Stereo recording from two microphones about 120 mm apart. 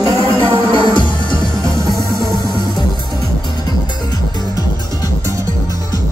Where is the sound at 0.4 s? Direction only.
40° left (ahead or behind).